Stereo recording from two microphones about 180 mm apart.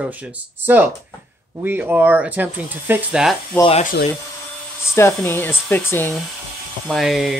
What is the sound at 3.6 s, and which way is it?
Speech, 30° left (ahead or behind).